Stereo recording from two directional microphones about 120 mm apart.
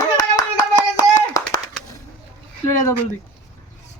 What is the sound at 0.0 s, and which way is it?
Hands, 30° left (ahead or behind).